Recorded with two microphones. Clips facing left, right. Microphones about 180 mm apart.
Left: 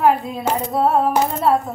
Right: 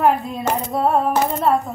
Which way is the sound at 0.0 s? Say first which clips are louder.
Left 1 dB; centre (ahead or behind).